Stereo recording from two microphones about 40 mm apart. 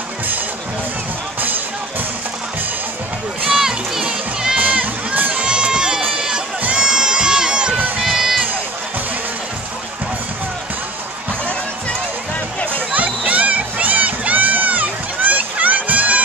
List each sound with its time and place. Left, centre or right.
3.5 s a sound: centre
4.0 s crowd: centre
4.6 s a sound: right
5.3 s run: right
6.1 s crowd: centre
6.6 s crowd: right
8.0 s crowd: centre
12.9 s crowd: right